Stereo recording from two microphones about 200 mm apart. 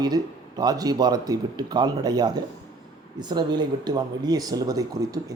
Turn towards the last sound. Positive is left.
turn(degrees=-15)  # may be behind; listen again after turning